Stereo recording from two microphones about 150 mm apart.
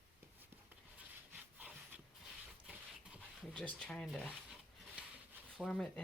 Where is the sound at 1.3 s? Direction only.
10° right (ahead or behind).